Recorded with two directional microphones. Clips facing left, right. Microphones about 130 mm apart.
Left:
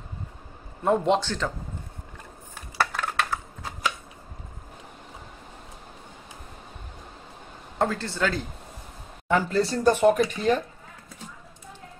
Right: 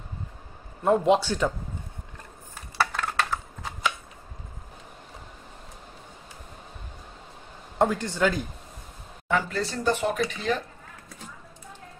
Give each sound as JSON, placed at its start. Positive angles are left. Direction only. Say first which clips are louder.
{"t": 0.8, "sound": "a man's voice", "louder": "right 1 dB", "side_deg": 0}
{"t": 2.8, "sound": "a sound", "louder": "even", "side_deg": 0}
{"t": 7.8, "sound": "speech", "louder": "right 2 dB", "side_deg": -15}
{"t": 9.3, "sound": "speech", "louder": "left 4 dB", "side_deg": 40}